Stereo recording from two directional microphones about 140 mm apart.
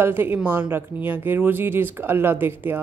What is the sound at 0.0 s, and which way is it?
Speech, 15° right (ahead or behind).